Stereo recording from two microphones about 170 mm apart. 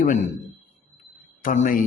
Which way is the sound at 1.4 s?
50° left (ahead or behind).